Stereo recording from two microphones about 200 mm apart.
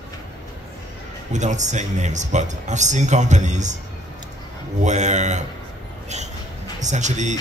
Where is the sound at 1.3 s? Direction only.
35° right (ahead or behind).